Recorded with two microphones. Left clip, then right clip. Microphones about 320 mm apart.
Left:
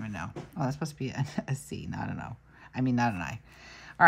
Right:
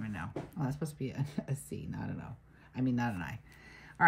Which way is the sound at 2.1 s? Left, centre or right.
Left.